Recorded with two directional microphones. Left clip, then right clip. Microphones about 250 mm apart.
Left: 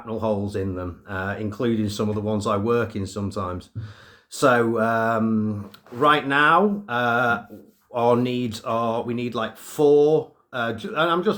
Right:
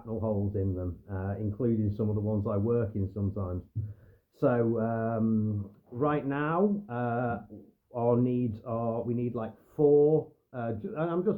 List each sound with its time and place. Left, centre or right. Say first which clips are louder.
0.2 s speech: left 8 dB; centre
3.2 s speech: left 11 dB; centre
4.4 s speech: left 9 dB; centre